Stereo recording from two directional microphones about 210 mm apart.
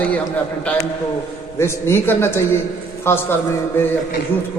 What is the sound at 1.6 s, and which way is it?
A man's voice, 10° left (ahead or behind).